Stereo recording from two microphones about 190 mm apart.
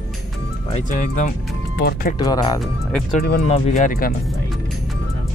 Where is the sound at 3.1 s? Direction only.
50° left (ahead or behind).